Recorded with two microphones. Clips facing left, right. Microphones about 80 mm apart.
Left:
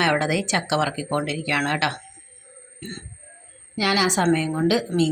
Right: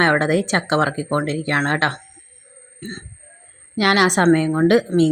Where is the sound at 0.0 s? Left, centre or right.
Right.